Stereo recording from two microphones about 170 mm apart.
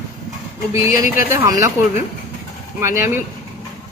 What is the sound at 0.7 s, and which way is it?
A woman's voice, 15° right (ahead or behind).